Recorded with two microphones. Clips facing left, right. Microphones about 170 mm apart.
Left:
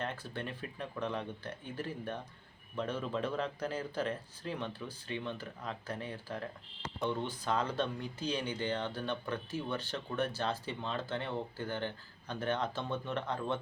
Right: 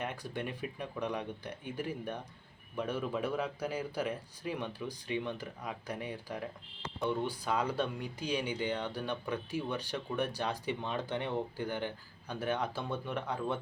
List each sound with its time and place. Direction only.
0.0 s speech: 15° right (ahead or behind)